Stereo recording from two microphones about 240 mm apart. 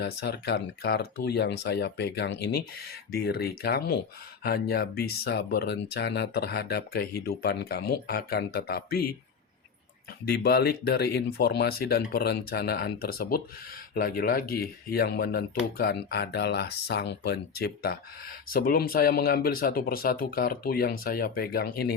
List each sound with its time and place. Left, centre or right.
0.0 s speech: left
10.2 s speech: left